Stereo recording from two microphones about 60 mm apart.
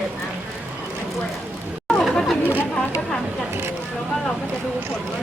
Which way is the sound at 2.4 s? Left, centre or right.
Right.